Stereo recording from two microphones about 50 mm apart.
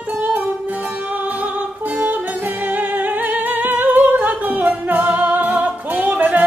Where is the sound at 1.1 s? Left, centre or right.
Right.